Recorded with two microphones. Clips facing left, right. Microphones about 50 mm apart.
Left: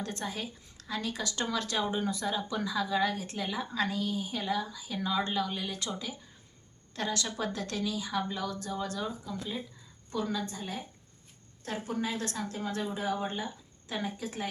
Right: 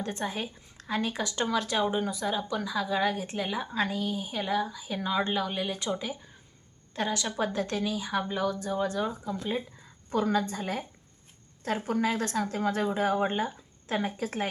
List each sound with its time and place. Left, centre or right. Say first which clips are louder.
0.0 s a woman's voice: right 4 dB; centre
9.3 s speech: right 5 dB; right
10.1 s a woman's voice: right 6 dB; right
11.9 s a woman's voice: right 5 dB; right